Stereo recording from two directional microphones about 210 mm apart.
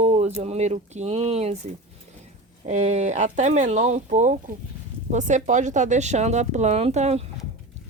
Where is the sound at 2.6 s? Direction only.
35° right (ahead or behind).